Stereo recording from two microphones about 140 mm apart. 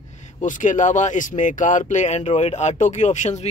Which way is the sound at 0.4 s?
65° left (ahead or behind).